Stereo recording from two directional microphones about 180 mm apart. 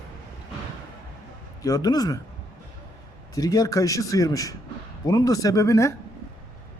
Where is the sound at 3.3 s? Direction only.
20° left (ahead or behind).